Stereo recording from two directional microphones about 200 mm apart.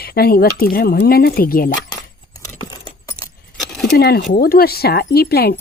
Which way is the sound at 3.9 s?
50° left (ahead or behind).